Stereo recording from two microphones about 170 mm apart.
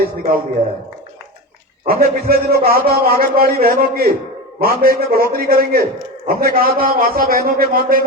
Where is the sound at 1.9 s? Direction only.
60° right (ahead or behind).